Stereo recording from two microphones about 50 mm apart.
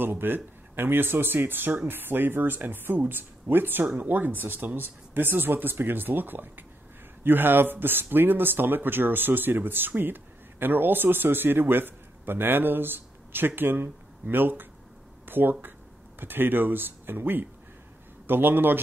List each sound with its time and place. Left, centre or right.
0.0 s a man's voice: right